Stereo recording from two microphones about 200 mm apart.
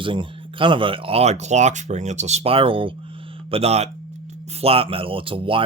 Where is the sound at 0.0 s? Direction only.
25° right (ahead or behind).